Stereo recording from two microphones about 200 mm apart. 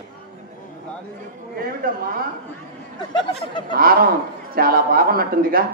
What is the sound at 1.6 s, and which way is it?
Speech, 45° right (ahead or behind).